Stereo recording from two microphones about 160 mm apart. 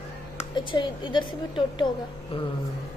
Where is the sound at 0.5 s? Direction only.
30° left (ahead or behind).